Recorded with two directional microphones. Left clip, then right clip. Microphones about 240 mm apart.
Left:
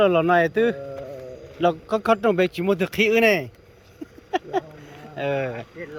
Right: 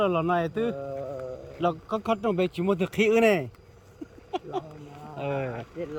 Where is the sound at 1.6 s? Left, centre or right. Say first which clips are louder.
Left 6 dB; centre.